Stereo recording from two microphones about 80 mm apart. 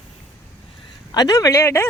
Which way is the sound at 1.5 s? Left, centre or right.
Left.